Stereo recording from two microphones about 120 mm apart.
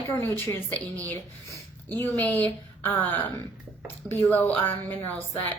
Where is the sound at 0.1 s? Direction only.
20° left (ahead or behind).